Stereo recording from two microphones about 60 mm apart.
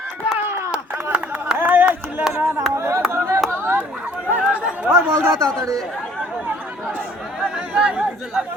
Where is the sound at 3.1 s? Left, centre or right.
Right.